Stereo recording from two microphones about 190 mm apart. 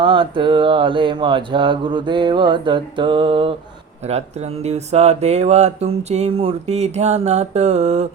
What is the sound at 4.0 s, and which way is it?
Speech, 35° right (ahead or behind).